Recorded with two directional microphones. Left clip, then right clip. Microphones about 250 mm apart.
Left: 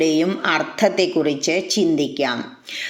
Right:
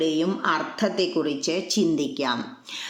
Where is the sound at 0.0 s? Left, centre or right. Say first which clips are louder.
Left 5 dB; centre.